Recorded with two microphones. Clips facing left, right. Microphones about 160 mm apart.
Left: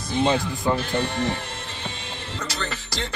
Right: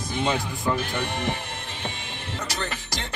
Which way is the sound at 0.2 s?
30° left (ahead or behind).